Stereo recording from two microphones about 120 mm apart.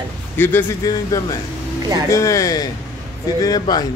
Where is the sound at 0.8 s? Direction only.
30° left (ahead or behind).